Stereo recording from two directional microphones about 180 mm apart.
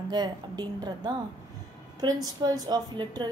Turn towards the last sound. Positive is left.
turn(degrees=-25)  # may be behind; listen again after turning